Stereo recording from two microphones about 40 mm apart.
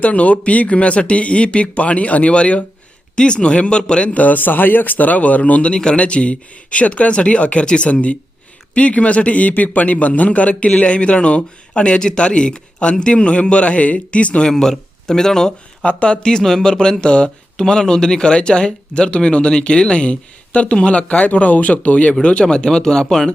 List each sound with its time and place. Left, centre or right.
0.0 s a man's voice: left
4.2 s a man's voice: left
5.7 s a man's voice: left
14.5 s speech: centre
15.8 s a man's voice: left
16.2 s a man's voice: centre